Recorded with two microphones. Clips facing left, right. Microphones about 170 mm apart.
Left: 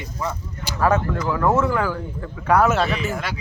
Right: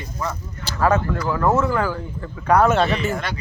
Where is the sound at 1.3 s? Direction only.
5° right (ahead or behind).